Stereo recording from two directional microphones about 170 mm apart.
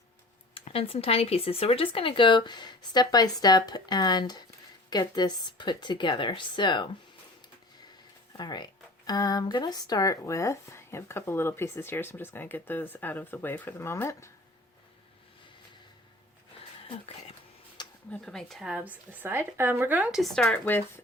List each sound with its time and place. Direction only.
0.5 s speech: 35° left (ahead or behind)
8.4 s speech: 25° left (ahead or behind)
16.9 s a sound: 35° left (ahead or behind)
18.1 s speech: 5° left (ahead or behind)